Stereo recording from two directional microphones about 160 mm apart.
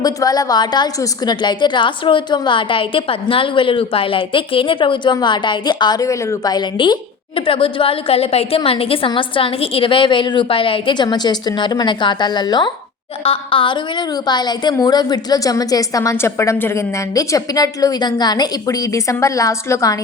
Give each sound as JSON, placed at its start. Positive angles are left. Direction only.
{"t": 0.0, "sound": "a woman's voice", "side_deg": 25}